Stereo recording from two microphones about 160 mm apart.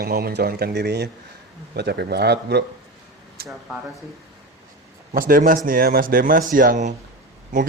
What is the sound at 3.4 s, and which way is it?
Speech, 75° right (ahead or behind).